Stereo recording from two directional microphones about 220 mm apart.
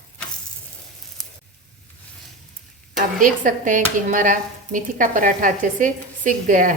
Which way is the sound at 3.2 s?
35° right (ahead or behind).